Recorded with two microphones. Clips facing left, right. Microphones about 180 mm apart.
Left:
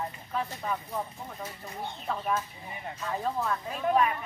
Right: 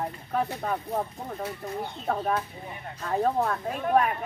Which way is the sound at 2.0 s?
55° right (ahead or behind).